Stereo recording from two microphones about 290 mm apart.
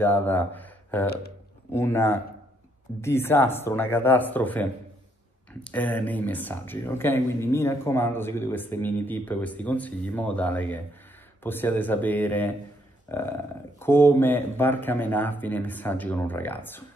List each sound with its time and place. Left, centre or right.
0.0 s speech: centre
1.0 s speech: left
1.7 s speech: centre